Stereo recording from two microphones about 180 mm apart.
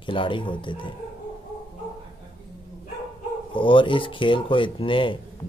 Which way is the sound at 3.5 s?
30° left (ahead or behind).